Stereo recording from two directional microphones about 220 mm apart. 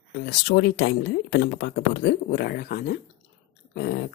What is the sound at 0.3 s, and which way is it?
Speech, 50° left (ahead or behind).